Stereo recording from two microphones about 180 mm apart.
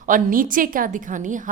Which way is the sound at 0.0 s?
50° right (ahead or behind).